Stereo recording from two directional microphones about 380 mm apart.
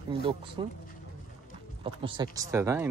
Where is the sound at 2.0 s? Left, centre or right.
Centre.